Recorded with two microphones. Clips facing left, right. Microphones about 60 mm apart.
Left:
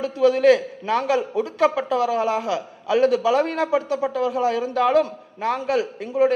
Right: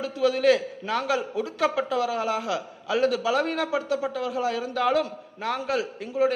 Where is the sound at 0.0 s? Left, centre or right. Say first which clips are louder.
Left 5 dB; left.